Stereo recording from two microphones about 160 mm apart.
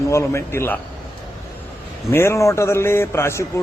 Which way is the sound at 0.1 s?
15° left (ahead or behind).